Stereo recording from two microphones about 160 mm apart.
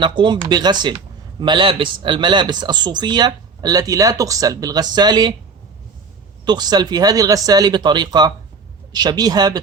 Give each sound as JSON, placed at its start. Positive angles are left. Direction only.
{"t": 0.0, "sound": "speech", "side_deg": -30}
{"t": 6.4, "sound": "speech", "side_deg": -25}